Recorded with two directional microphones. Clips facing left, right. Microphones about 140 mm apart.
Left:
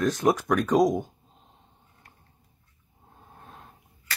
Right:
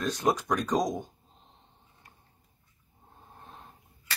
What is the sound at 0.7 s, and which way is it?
Speech, 10° left (ahead or behind).